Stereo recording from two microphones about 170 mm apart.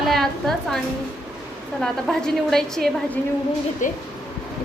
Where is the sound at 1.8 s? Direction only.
5° left (ahead or behind).